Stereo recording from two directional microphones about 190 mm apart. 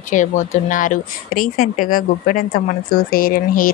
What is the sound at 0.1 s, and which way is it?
Speech, 40° left (ahead or behind).